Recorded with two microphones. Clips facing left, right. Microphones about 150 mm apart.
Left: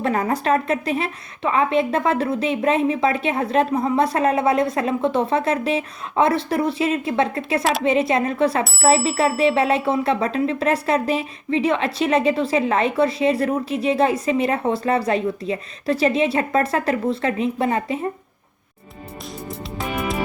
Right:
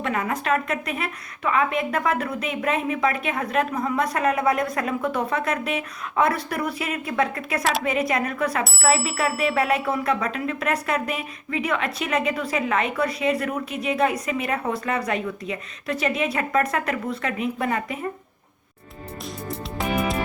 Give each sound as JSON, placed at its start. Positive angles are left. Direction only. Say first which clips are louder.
{"t": 0.0, "sound": "speech", "louder": "left 5 dB", "side_deg": 35}
{"t": 7.6, "sound": "speech", "louder": "left 1 dB", "side_deg": 0}
{"t": 7.9, "sound": "speech", "louder": "left 5 dB", "side_deg": 25}